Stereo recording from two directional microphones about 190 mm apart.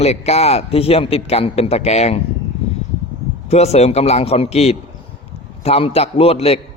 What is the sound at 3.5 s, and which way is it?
Speech, 35° left (ahead or behind).